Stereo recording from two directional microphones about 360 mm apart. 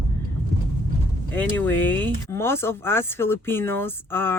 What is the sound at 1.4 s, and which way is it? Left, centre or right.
Speech, centre.